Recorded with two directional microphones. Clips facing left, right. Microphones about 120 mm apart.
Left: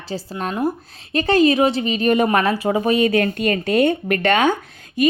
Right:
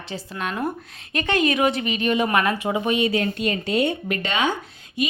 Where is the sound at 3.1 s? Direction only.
55° left (ahead or behind).